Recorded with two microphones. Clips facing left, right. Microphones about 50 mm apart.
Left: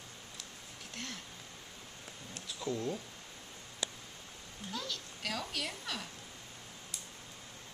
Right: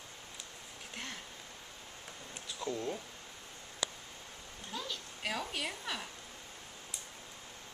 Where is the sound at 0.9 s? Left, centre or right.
Centre.